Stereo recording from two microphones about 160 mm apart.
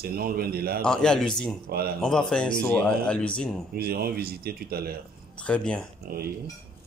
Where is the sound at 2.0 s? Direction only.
5° left (ahead or behind).